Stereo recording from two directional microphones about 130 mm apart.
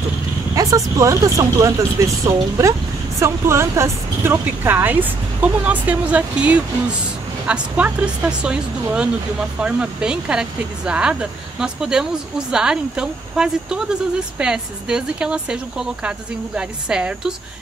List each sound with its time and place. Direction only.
0.6 s speech: 25° right (ahead or behind); by 17.3 s 5° right (ahead or behind)